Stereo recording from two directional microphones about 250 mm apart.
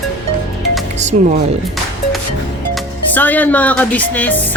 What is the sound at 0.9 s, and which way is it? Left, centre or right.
Speech, right.